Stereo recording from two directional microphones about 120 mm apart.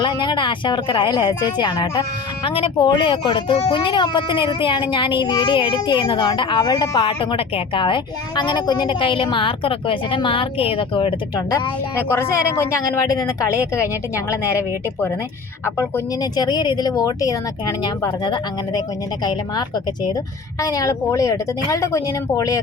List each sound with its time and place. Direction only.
0.0 s speech: 40° left (ahead or behind)
11.9 s speech: 20° left (ahead or behind)
16.3 s speech: 35° left (ahead or behind)